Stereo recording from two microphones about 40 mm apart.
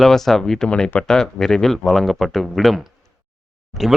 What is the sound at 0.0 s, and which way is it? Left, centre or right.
Speech, centre.